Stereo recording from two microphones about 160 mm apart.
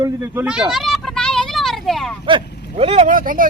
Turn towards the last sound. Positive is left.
turn(degrees=-60)  # may be behind; listen again after turning